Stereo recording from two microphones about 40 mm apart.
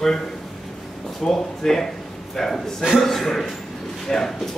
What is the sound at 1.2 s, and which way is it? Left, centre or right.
Speech, centre.